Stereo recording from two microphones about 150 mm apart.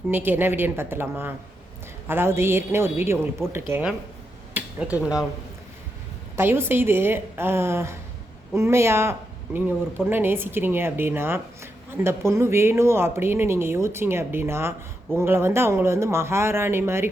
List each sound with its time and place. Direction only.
0.1 s a woman's voice: 15° right (ahead or behind)
4.5 s a sound: 10° right (ahead or behind)
6.3 s a woman's voice: 15° right (ahead or behind)